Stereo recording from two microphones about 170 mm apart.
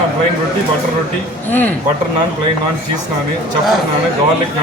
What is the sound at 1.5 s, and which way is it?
Speech, 10° left (ahead or behind).